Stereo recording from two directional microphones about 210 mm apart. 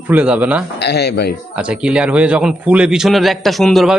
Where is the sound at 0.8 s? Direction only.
50° left (ahead or behind).